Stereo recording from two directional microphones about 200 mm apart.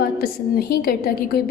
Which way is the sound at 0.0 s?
50° left (ahead or behind).